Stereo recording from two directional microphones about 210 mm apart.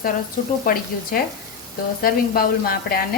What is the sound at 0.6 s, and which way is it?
Speech, 45° left (ahead or behind).